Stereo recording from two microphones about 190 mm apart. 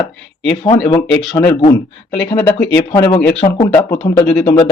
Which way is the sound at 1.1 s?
5° left (ahead or behind).